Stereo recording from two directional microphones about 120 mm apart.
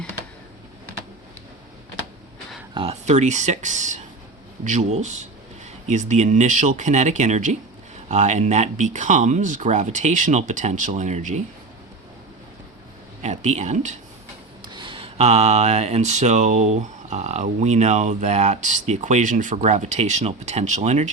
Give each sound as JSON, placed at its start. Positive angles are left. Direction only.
{"t": 2.8, "sound": "speech", "side_deg": -45}
{"t": 3.1, "sound": "speech", "side_deg": -80}
{"t": 13.2, "sound": "speech", "side_deg": -75}
{"t": 14.6, "sound": "speech", "side_deg": -40}